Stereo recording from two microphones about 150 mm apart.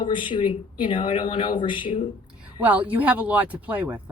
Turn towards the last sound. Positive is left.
turn(degrees=-10)  # may be behind; listen again after turning